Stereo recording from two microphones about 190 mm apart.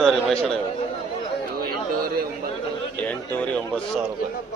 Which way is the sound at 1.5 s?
55° right (ahead or behind).